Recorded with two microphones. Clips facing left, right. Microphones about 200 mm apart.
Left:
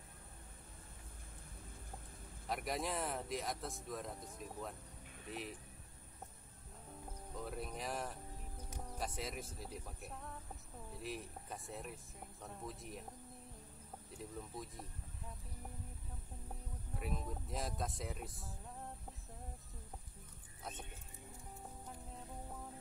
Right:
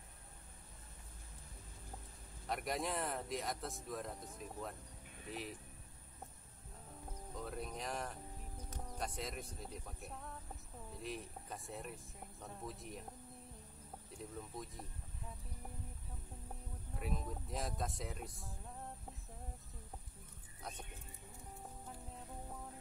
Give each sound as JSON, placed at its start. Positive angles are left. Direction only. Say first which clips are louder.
{"t": 2.4, "sound": "speech", "louder": "even", "side_deg": 0}
{"t": 7.3, "sound": "speech", "louder": "even", "side_deg": 0}
{"t": 14.1, "sound": "music", "louder": "even", "side_deg": 0}
{"t": 16.9, "sound": "music", "louder": "even", "side_deg": 0}
{"t": 21.8, "sound": "music", "louder": "even", "side_deg": 0}